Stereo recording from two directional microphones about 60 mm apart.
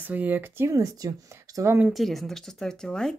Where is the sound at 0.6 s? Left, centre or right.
Right.